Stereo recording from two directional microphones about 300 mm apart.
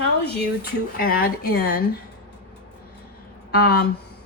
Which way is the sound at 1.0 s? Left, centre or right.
Left.